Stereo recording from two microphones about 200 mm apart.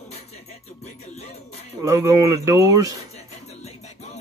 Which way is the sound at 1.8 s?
15° right (ahead or behind).